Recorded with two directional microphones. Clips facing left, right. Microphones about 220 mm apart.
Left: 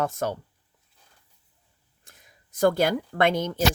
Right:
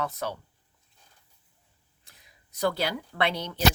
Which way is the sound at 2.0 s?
50° left (ahead or behind).